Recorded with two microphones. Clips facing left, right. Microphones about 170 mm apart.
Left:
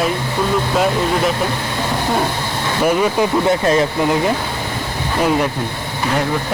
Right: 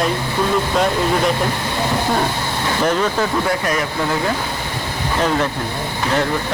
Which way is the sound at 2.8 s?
10° left (ahead or behind).